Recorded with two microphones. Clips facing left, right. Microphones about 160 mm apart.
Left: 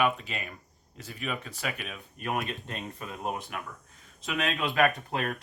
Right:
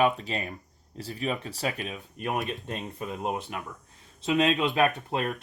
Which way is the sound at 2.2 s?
20° right (ahead or behind).